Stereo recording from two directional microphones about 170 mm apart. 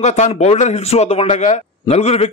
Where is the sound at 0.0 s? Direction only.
40° left (ahead or behind).